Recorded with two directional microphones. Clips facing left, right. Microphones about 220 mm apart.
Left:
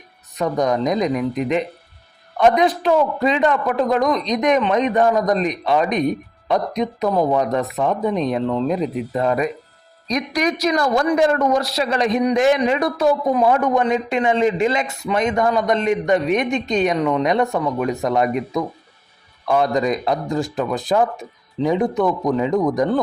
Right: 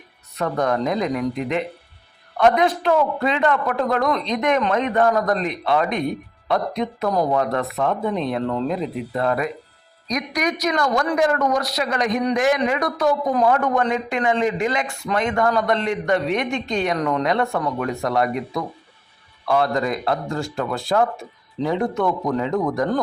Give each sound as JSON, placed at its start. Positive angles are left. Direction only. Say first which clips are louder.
{"t": 0.3, "sound": "a man's voice", "louder": "left 2 dB", "side_deg": 15}
{"t": 10.1, "sound": "a man's voice", "louder": "left 3 dB", "side_deg": 30}
{"t": 17.0, "sound": "speech", "louder": "left 3 dB", "side_deg": 5}
{"t": 17.2, "sound": "a man's voice", "louder": "left 3 dB", "side_deg": 20}